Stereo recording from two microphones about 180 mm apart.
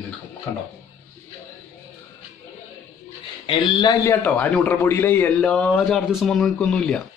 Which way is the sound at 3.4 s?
25° left (ahead or behind).